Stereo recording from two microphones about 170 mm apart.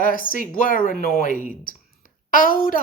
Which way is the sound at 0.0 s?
55° left (ahead or behind).